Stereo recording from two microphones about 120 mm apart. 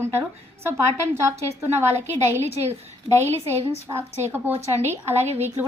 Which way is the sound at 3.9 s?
15° right (ahead or behind).